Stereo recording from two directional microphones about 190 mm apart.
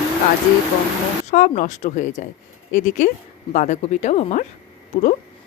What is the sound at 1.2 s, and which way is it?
A woman's voice, 40° left (ahead or behind).